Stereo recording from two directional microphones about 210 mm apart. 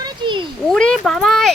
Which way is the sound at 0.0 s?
20° right (ahead or behind).